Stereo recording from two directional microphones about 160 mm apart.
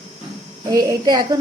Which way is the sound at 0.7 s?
20° right (ahead or behind).